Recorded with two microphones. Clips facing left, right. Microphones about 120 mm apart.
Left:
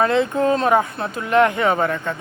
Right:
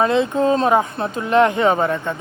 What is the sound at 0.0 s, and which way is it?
Speech, 20° right (ahead or behind).